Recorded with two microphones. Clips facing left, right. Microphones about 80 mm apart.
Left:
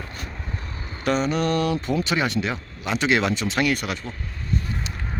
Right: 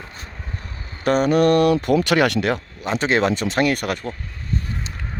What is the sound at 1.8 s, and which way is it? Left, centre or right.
Speech, right.